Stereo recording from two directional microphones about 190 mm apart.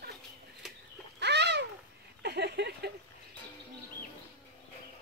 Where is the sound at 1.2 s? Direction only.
65° right (ahead or behind).